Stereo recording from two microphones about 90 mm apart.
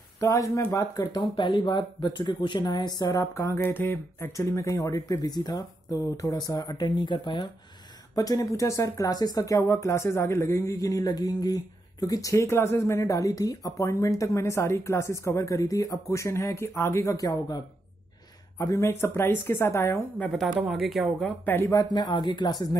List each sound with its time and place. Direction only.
0.2 s speech: 35° left (ahead or behind)
1.3 s speech: 60° left (ahead or behind)
3.1 s speech: 40° left (ahead or behind)
3.5 s speech: 25° left (ahead or behind)
4.3 s speech: 35° left (ahead or behind)
6.5 s speech: 55° left (ahead or behind)
8.1 s speech: 45° left (ahead or behind)
18.8 s speech: 30° left (ahead or behind)
20.6 s speech: centre (ahead or behind)
21.9 s speech: 55° left (ahead or behind)